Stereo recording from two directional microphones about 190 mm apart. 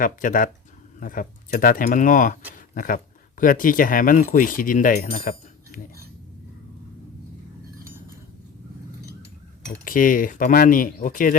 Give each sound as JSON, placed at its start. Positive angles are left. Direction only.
{"t": 0.0, "sound": "speech", "side_deg": 45}
{"t": 9.6, "sound": "speech", "side_deg": 45}